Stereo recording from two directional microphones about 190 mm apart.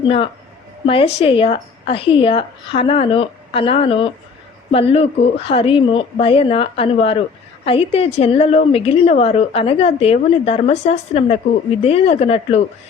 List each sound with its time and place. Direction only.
0.0 s a woman's voice: 30° left (ahead or behind)